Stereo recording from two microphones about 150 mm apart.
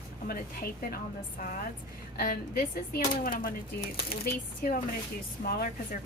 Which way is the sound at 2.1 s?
90° left.